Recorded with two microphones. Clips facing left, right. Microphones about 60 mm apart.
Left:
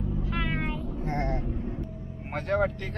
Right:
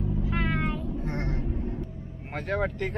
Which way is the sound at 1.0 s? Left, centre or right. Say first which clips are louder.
Left 2 dB; left.